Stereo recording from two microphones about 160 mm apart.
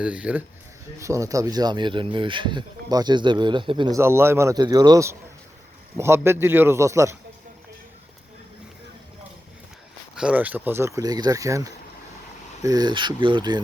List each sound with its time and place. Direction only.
0.0 s speech: 5° right (ahead or behind)
0.9 s speech: 20° right (ahead or behind)
3.9 s speech: 15° right (ahead or behind)
10.2 s speech: 10° right (ahead or behind); by 13.6 s 30° right (ahead or behind)